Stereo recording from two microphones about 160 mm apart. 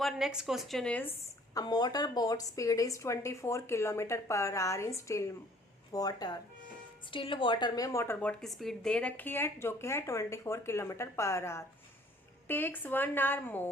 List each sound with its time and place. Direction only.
0.0 s speech: 5° right (ahead or behind)
1.5 s a woman's voice: 25° left (ahead or behind)